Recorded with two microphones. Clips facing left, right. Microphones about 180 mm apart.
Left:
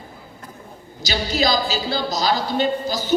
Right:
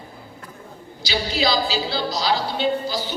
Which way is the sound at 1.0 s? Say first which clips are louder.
Left 1 dB; 45° left (ahead or behind).